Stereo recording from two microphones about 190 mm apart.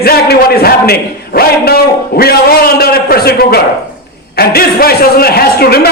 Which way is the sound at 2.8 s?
55° left (ahead or behind).